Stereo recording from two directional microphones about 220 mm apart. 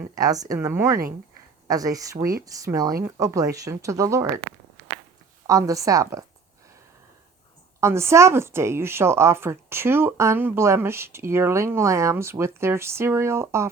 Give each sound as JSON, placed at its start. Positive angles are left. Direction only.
{"t": 0.2, "sound": "a woman's voice", "side_deg": -15}
{"t": 5.5, "sound": "a woman's voice", "side_deg": -15}
{"t": 7.8, "sound": "a woman's voice", "side_deg": -10}